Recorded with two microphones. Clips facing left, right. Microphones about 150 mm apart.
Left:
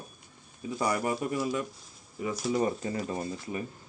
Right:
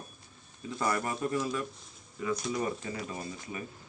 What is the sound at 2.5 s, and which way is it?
Speech, 30° left (ahead or behind).